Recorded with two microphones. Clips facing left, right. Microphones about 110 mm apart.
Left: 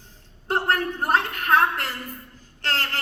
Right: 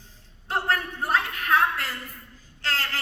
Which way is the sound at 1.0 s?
40° left (ahead or behind).